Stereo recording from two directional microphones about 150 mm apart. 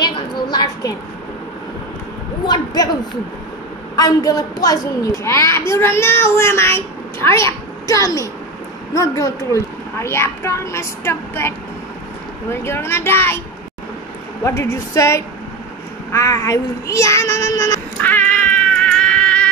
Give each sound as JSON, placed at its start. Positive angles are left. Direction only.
{"t": 0.0, "sound": "a sound", "side_deg": 25}
{"t": 2.4, "sound": "a child's voice", "side_deg": 25}
{"t": 3.9, "sound": "a child's voice", "side_deg": 25}
{"t": 14.4, "sound": "a child's voice", "side_deg": 20}
{"t": 16.1, "sound": "child singing", "side_deg": 20}